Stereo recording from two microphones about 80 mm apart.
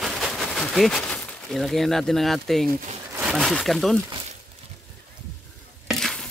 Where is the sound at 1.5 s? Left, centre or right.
Centre.